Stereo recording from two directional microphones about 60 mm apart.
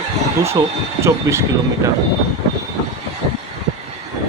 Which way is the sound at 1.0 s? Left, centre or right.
Right.